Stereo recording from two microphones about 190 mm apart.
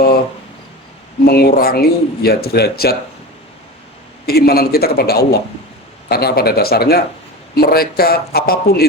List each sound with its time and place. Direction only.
1.2 s speech: 55° left (ahead or behind)
4.3 s speech: 55° left (ahead or behind)